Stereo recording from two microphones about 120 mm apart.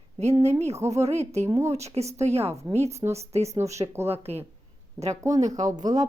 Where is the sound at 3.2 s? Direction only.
60° right (ahead or behind).